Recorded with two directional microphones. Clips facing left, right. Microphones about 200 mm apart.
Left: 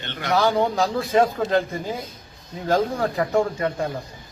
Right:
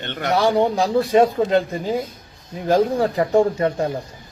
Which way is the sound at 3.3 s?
30° right (ahead or behind).